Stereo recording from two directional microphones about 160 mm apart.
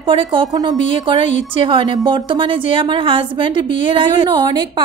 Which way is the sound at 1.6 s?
30° right (ahead or behind).